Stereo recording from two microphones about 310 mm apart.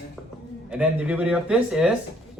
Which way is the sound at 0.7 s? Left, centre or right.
Centre.